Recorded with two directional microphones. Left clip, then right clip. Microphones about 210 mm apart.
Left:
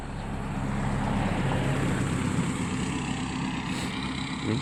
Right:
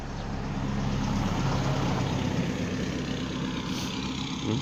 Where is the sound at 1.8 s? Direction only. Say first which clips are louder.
Even; 50° left (ahead or behind); by 3.7 s 30° left (ahead or behind).